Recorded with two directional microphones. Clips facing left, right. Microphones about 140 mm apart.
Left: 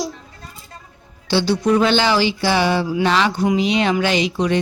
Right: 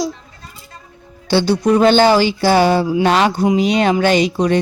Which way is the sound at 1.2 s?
50° right (ahead or behind).